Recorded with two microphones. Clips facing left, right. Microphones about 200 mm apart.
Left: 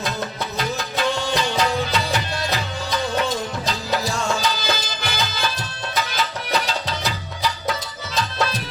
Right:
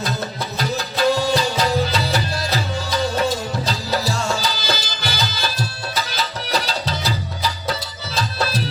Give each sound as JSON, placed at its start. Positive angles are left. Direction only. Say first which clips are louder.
{"t": 0.6, "sound": "music", "louder": "right 4 dB", "side_deg": -35}